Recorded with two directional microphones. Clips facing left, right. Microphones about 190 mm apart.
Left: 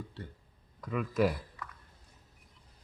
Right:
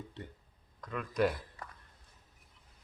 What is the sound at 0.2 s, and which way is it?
Speech, 20° right (ahead or behind).